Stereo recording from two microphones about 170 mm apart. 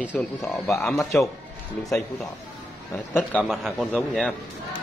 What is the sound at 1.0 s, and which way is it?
Speech, 15° left (ahead or behind).